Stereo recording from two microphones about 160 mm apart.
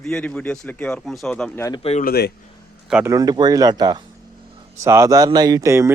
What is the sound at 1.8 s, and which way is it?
Speech, 45° left (ahead or behind).